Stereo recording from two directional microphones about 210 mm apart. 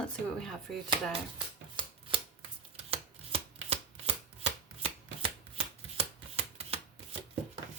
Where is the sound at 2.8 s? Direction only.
30° right (ahead or behind).